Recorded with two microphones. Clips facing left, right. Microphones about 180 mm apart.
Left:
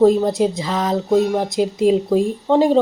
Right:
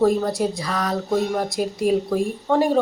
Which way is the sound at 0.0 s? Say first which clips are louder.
Left 5 dB; 20° left (ahead or behind).